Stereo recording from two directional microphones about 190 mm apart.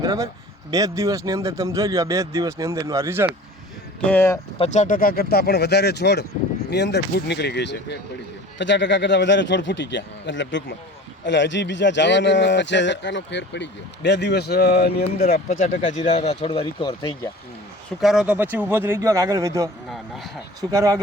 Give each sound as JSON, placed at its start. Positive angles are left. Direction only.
{"t": 0.0, "sound": "speech", "side_deg": -15}
{"t": 4.1, "sound": "speech", "side_deg": 10}
{"t": 4.5, "sound": "speech", "side_deg": 35}
{"t": 15.6, "sound": "speech", "side_deg": 40}
{"t": 18.0, "sound": "speech", "side_deg": -5}
{"t": 19.9, "sound": "speech", "side_deg": 0}
{"t": 20.6, "sound": "speech", "side_deg": -20}